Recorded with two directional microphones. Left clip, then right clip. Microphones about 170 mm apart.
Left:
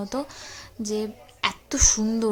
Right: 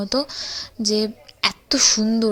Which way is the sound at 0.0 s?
25° right (ahead or behind).